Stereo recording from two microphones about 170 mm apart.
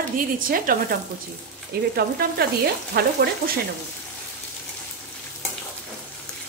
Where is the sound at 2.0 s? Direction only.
65° right (ahead or behind).